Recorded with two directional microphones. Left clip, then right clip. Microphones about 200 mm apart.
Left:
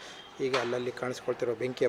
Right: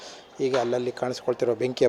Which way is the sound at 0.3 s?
25° right (ahead or behind).